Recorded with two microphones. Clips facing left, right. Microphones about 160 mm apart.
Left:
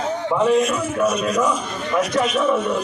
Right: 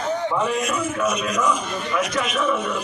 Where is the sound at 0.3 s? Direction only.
25° left (ahead or behind).